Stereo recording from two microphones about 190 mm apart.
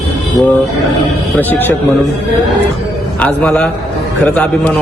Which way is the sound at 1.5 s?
10° left (ahead or behind).